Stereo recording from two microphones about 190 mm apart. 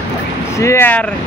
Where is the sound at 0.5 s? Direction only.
15° left (ahead or behind).